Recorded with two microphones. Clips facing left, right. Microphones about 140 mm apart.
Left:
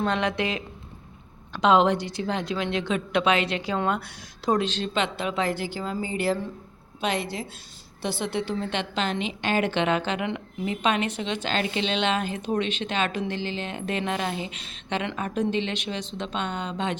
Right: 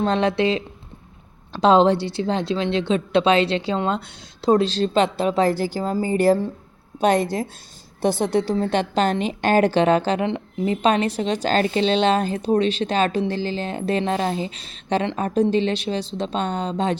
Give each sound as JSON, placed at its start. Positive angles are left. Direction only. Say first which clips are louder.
{"t": 0.0, "sound": "a woman's voice", "louder": "right 6 dB", "side_deg": -30}